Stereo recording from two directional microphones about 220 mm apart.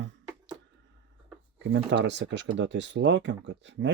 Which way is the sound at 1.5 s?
55° right (ahead or behind).